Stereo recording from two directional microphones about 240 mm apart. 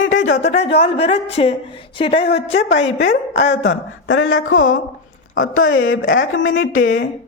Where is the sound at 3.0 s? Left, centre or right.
Left.